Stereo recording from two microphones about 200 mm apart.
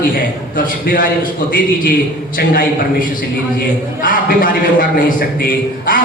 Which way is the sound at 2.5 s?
45° left (ahead or behind).